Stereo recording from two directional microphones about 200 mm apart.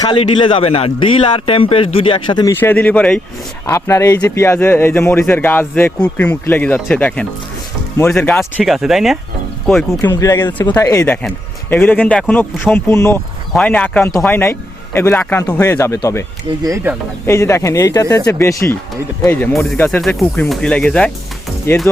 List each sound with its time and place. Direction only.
0.0 s speech: 25° left (ahead or behind)
2.6 s speech: 10° left (ahead or behind)
10.0 s speech: 15° left (ahead or behind)
16.6 s speech: 10° right (ahead or behind)
17.2 s speech: 15° left (ahead or behind)